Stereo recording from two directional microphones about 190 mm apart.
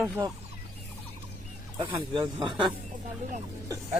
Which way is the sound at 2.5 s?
Centre (ahead or behind).